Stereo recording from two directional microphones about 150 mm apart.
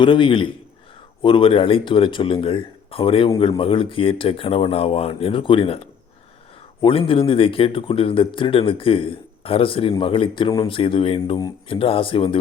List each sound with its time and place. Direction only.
0.0 s a man's voice: 35° left (ahead or behind)